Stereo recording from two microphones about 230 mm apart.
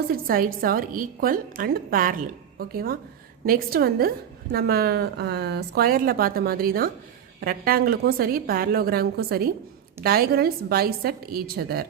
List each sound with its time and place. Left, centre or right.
0.3 s a woman's voice: right